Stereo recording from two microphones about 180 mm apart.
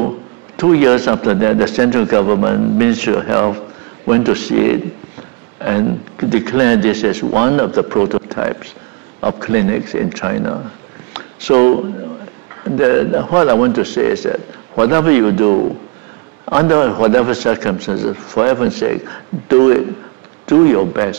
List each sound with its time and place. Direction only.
0.7 s a man's voice: 15° right (ahead or behind)